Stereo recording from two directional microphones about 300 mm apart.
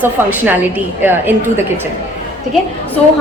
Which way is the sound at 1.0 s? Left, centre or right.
Centre.